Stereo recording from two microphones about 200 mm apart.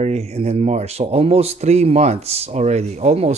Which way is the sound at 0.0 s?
30° right (ahead or behind).